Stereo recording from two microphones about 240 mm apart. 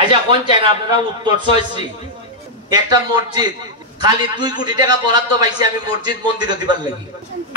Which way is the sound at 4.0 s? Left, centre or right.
Centre.